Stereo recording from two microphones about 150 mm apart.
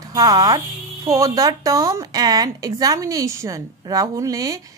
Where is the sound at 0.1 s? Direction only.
25° right (ahead or behind).